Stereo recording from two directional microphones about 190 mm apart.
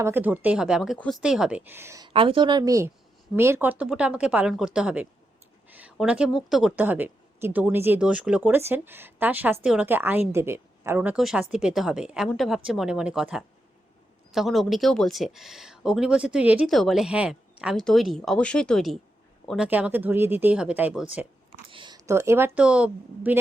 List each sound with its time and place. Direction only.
0.0 s speech: 10° right (ahead or behind)
2.1 s a woman's voice: 25° right (ahead or behind); by 21.1 s 5° right (ahead or behind)
21.7 s speech: 25° right (ahead or behind); by 23.4 s 10° right (ahead or behind)